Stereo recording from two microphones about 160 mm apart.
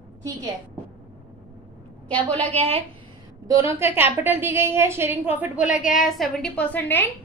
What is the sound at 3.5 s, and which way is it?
A woman's voice, 15° right (ahead or behind).